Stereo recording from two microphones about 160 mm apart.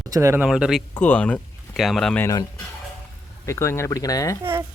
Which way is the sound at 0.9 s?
10° left (ahead or behind).